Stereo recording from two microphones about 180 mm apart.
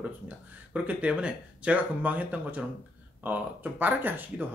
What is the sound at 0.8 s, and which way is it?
Speech, 5° right (ahead or behind).